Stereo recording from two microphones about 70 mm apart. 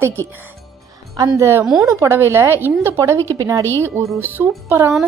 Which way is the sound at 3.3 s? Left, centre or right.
Right.